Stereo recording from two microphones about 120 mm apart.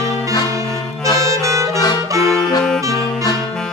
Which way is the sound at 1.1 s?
25° right (ahead or behind).